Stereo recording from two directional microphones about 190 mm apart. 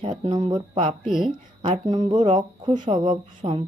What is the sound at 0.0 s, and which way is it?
Speech, 25° right (ahead or behind).